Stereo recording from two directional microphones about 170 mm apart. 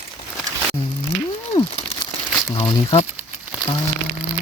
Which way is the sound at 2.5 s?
35° left (ahead or behind).